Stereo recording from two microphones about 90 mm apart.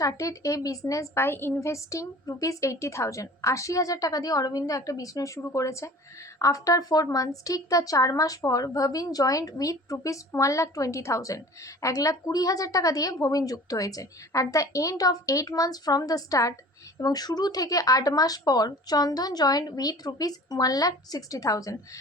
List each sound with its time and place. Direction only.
0.0 s a woman's voice: 35° left (ahead or behind)